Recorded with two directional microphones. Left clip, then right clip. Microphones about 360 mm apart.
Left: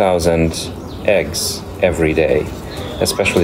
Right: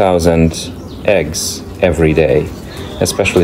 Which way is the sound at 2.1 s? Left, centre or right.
Right.